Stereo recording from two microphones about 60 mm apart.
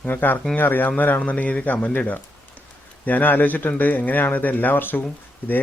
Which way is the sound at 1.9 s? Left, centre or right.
Left.